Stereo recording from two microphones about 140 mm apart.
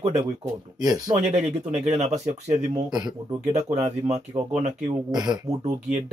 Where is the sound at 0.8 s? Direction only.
30° right (ahead or behind).